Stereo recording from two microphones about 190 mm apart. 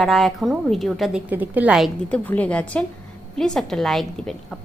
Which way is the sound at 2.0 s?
10° left (ahead or behind).